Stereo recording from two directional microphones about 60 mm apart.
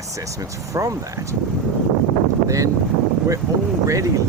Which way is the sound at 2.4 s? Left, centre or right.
Right.